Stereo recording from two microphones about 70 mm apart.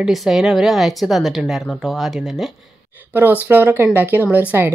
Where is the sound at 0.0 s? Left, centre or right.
Centre.